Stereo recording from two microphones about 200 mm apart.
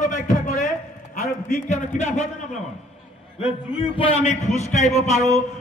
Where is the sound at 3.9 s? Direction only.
30° left (ahead or behind).